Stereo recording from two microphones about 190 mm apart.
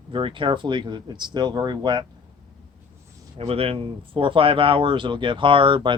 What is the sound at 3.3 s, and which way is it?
Speech, 30° right (ahead or behind).